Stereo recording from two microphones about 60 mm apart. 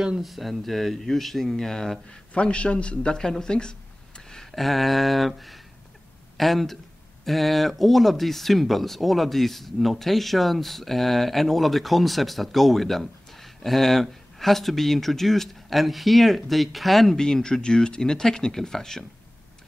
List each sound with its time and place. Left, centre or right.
0.2 s speech: centre
2.0 s a man's voice: centre